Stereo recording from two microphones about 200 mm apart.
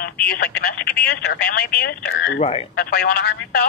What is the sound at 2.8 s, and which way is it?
Speech, 50° left (ahead or behind).